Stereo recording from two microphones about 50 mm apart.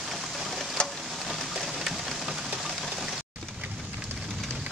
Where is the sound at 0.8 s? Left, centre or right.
Left.